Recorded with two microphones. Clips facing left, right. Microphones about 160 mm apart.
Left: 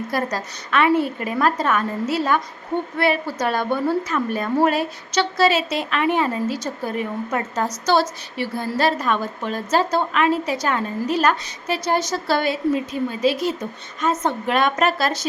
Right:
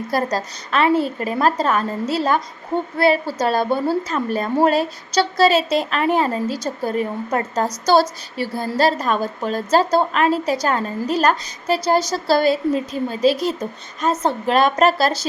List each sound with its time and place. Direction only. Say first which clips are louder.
0.1 s a woman's voice: right 6 dB; 35° right (ahead or behind)